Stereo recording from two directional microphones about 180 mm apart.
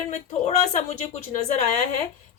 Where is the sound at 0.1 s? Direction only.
40° left (ahead or behind).